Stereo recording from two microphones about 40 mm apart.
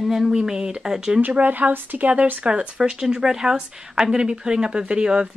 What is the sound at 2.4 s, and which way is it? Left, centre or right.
Speech, right.